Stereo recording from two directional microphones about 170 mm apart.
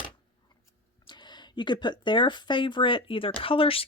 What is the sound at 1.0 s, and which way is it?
Speech, 25° left (ahead or behind).